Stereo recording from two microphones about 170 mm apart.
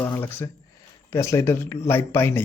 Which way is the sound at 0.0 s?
15° left (ahead or behind).